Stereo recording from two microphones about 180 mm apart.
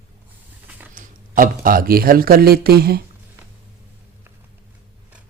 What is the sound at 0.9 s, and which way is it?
Speech, 50° right (ahead or behind).